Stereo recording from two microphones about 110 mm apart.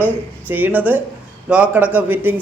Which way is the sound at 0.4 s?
15° right (ahead or behind).